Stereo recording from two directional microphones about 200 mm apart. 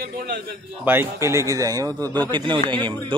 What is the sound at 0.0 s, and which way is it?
Speech, 50° right (ahead or behind).